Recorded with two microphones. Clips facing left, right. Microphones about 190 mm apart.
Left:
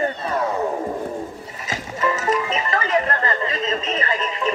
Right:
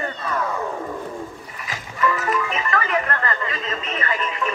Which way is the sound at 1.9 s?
25° left (ahead or behind).